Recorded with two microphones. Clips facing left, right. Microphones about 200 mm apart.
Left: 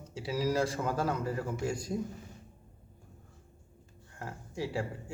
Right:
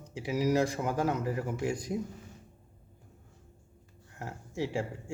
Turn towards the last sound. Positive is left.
turn(degrees=-20)  # may be behind; listen again after turning